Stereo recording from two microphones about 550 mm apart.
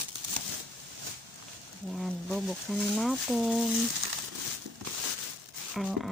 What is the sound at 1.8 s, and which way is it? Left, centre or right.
Speech, centre.